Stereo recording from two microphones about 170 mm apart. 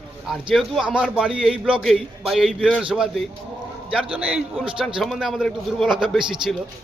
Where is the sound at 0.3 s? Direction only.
Centre (ahead or behind).